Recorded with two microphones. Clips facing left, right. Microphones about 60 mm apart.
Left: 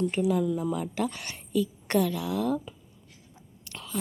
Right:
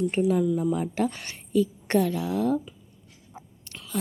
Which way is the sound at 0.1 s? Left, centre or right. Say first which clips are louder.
Right 3 dB; right.